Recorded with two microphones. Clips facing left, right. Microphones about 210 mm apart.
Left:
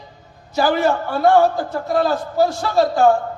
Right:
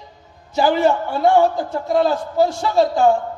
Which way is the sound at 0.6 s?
20° right (ahead or behind).